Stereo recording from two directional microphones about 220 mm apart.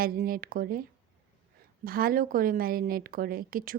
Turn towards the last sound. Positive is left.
turn(degrees=-40)  # may be behind; listen again after turning